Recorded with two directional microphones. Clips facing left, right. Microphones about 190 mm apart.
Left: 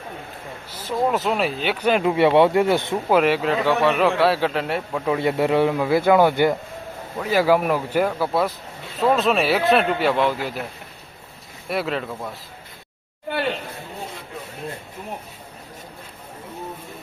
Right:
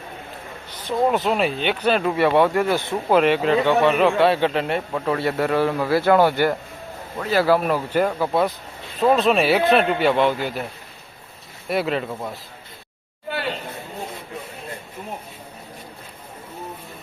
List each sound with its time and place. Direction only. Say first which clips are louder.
0.7 s speech: right 2 dB; 5° left (ahead or behind); by 2.9 s 20° left (ahead or behind)
3.1 s a man's voice: right 2 dB; 5° left (ahead or behind)
5.1 s a man's voice: left 2 dB; 20° left (ahead or behind); by 10.6 s centre (ahead or behind)
11.7 s a man's voice: right 2 dB; centre (ahead or behind)